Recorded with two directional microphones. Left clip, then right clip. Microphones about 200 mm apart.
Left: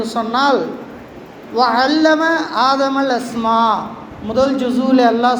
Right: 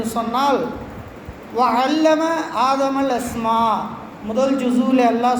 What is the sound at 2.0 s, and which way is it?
A man's voice, 25° left (ahead or behind).